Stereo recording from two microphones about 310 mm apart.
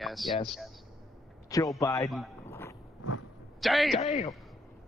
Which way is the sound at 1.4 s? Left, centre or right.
Centre.